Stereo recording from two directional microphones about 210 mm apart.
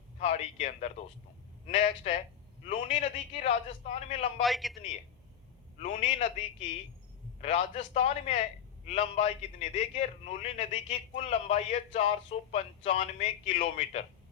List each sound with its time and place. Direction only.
0.2 s a man's voice: 30° left (ahead or behind)
4.4 s a man's voice: centre (ahead or behind)
5.8 s a man's voice: 35° left (ahead or behind)
7.4 s a man's voice: 35° left (ahead or behind)